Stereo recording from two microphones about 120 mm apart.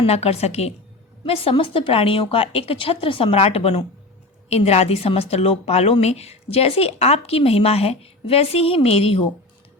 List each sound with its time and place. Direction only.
0.0 s a woman's voice: 60° left (ahead or behind)